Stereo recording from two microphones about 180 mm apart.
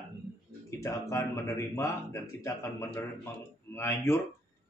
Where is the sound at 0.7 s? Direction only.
15° left (ahead or behind).